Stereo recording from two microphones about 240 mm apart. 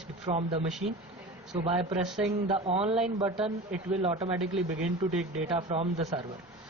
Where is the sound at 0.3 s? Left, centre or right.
Right.